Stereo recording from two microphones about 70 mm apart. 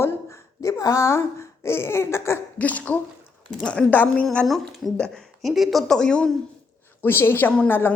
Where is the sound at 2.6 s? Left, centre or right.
Left.